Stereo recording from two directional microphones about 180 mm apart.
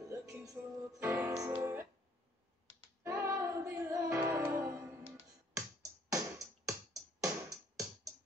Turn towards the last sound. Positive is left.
turn(degrees=-20)  # may be behind; listen again after turning